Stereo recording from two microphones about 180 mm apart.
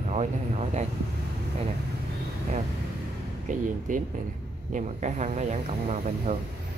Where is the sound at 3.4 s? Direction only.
45° right (ahead or behind).